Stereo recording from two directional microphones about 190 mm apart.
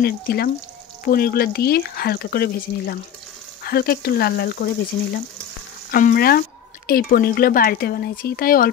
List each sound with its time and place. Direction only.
0.0 s speech: 55° left (ahead or behind)
5.9 s speech: 50° left (ahead or behind)